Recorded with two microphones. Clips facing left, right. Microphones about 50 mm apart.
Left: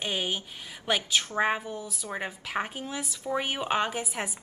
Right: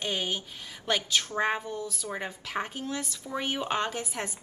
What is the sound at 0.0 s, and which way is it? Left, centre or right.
Speech, centre.